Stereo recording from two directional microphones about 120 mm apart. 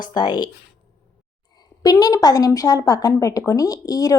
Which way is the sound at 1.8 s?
30° left (ahead or behind).